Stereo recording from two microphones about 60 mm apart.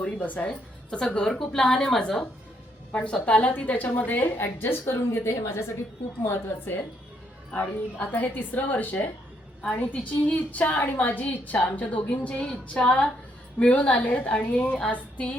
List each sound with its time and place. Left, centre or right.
0.0 s a woman's voice: left
0.9 s a woman's voice: centre
2.9 s a woman's voice: left
7.5 s a woman's voice: left